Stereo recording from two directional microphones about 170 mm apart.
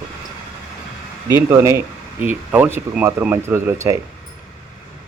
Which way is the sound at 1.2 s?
20° right (ahead or behind).